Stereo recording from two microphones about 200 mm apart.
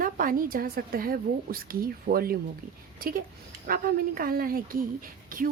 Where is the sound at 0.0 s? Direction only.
45° right (ahead or behind).